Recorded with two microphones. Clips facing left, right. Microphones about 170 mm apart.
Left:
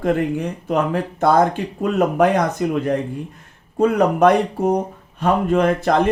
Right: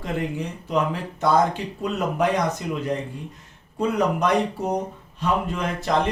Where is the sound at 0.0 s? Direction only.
55° left (ahead or behind).